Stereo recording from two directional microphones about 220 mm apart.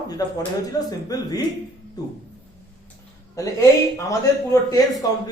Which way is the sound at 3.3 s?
15° left (ahead or behind).